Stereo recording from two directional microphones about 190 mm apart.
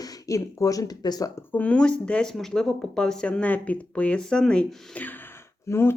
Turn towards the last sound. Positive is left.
turn(degrees=15)  # may be behind; listen again after turning